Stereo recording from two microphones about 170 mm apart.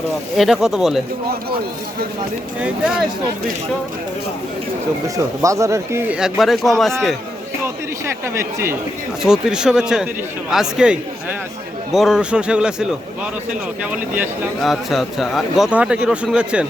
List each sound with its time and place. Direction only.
0.3 s speech: centre (ahead or behind)
2.6 s speech: 5° right (ahead or behind)
5.0 s speech: 20° right (ahead or behind); by 6.9 s centre (ahead or behind)
7.6 s speech: 15° right (ahead or behind)
9.2 s speech: 5° right (ahead or behind)